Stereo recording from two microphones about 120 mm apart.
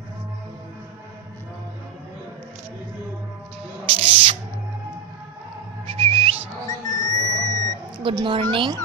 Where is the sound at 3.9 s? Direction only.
50° right (ahead or behind).